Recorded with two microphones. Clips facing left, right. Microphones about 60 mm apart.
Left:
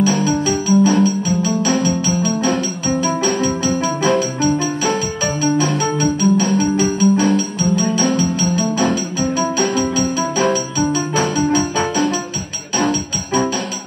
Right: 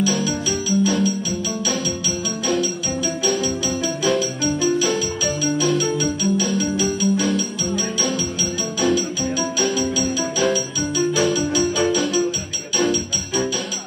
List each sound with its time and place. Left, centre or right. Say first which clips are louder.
0.0 s music: left 5 dB; left